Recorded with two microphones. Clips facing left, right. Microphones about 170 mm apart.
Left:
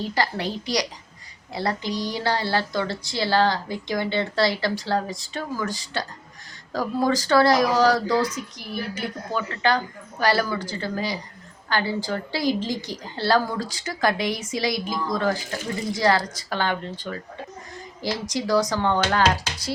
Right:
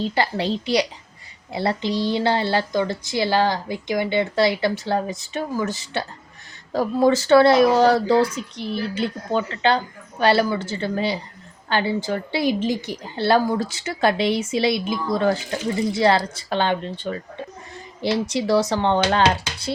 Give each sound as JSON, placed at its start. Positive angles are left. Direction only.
{"t": 0.0, "sound": "a woman's voice", "side_deg": -25}
{"t": 18.3, "sound": "a woman's voice", "side_deg": -25}